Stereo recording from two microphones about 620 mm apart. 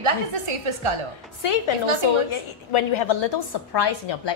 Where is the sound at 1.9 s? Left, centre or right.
Left.